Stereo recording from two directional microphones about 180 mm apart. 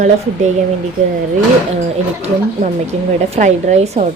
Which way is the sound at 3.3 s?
40° right (ahead or behind).